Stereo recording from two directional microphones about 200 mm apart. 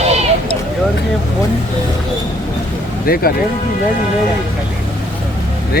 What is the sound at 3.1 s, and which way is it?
Speech, 45° left (ahead or behind).